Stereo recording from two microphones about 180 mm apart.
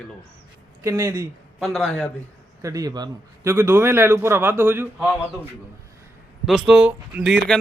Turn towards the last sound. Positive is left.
turn(degrees=0)  # may be behind; listen again after turning